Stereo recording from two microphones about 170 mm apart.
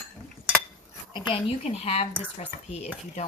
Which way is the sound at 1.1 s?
35° left (ahead or behind).